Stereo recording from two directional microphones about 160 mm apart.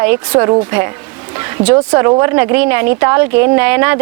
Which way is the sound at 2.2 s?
15° right (ahead or behind).